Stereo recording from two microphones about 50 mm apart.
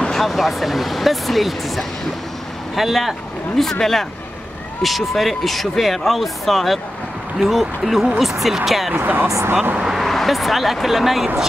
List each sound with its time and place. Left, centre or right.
0.0 s speech: centre
8.9 s speech: right
9.9 s speech: centre